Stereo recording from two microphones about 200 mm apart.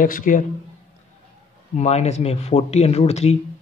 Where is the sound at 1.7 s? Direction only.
35° left (ahead or behind).